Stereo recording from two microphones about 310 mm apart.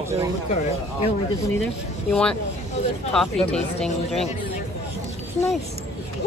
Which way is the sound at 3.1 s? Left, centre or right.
Centre.